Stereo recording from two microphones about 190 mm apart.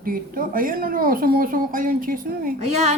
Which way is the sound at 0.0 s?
50° right (ahead or behind).